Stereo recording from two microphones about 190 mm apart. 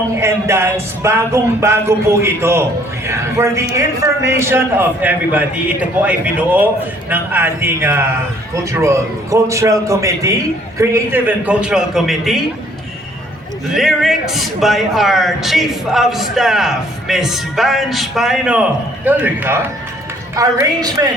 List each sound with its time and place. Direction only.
0.2 s a man's voice: 15° right (ahead or behind)
13.7 s a man's voice: centre (ahead or behind); by 21.1 s 20° right (ahead or behind)